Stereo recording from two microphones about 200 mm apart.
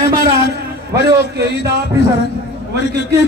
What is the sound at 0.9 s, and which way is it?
Speech, 55° right (ahead or behind).